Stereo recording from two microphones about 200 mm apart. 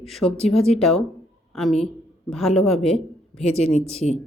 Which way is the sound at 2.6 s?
Centre (ahead or behind).